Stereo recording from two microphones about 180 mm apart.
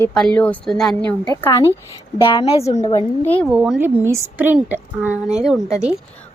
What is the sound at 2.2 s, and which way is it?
Speech, 30° left (ahead or behind).